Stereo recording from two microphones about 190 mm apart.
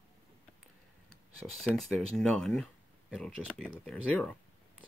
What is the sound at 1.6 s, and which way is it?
Speech, centre (ahead or behind).